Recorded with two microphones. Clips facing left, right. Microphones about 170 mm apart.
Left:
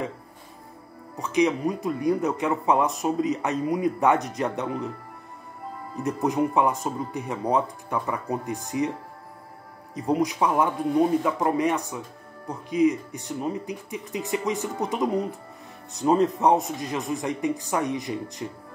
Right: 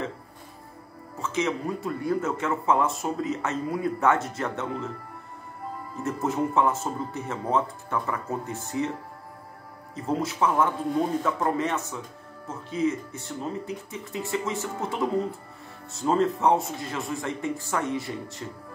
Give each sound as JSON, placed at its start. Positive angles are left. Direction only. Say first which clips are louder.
{"t": 1.1, "sound": "speech", "louder": "left 5 dB", "side_deg": 15}
{"t": 5.9, "sound": "speech", "louder": "left 3 dB", "side_deg": 15}
{"t": 9.9, "sound": "speech", "louder": "left 3 dB", "side_deg": 15}